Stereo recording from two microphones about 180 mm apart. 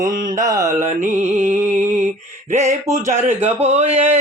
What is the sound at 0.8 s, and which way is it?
Mantra, 40° right (ahead or behind).